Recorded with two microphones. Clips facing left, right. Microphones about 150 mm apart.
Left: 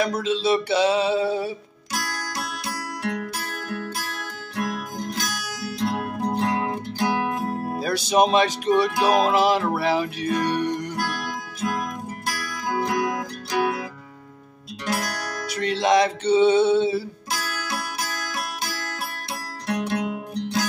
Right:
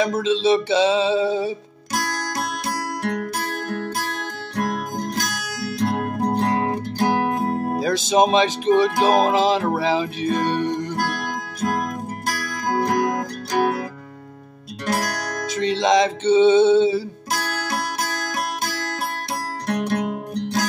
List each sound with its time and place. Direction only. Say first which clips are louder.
0.2 s a sound: right 4 dB; 20° right (ahead or behind)
2.0 s music: right 5 dB; 40° right (ahead or behind)
7.8 s speech: right 4 dB; 90° right
8.1 s a sound: right 1 dB; 20° right (ahead or behind)
11.0 s music: right 3 dB; 50° right (ahead or behind)
14.9 s music: right 3 dB; 45° right (ahead or behind)
15.4 s music: right 3 dB; 25° right (ahead or behind)
17.3 s music: right 5 dB; 45° right (ahead or behind)